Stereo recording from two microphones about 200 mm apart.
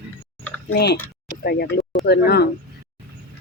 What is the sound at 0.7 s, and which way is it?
Speech, 55° left (ahead or behind).